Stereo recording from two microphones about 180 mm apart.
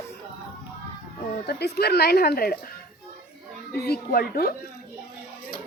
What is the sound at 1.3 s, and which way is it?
A woman's voice, 60° left (ahead or behind).